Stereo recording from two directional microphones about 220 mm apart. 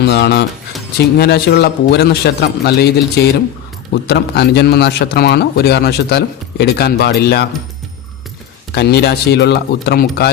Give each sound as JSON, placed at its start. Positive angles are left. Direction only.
{"t": 0.0, "sound": "a man's voice", "side_deg": 50}
{"t": 8.7, "sound": "a man's voice", "side_deg": 50}